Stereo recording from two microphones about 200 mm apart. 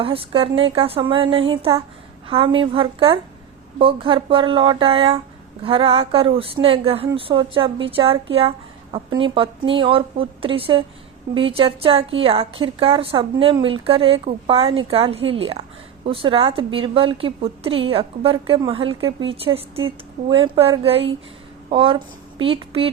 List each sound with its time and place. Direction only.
0.0 s a woman's voice: 25° right (ahead or behind)